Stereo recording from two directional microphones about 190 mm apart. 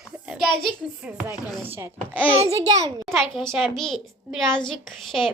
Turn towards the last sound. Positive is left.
turn(degrees=0)  # may be behind; listen again after turning